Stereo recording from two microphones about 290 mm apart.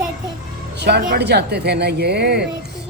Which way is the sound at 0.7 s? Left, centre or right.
Right.